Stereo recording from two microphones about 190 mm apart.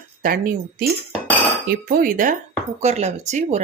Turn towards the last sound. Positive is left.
turn(degrees=-35)  # may be behind; listen again after turning